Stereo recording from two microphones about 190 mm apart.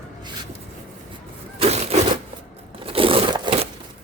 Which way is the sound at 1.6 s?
35° right (ahead or behind).